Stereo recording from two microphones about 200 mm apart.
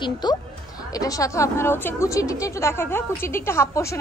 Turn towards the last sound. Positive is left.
turn(degrees=15)  # may be behind; listen again after turning